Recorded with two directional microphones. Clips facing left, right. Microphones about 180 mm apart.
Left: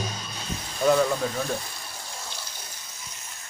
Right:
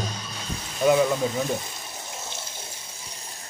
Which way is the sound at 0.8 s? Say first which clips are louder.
Right 2 dB; 10° right (ahead or behind).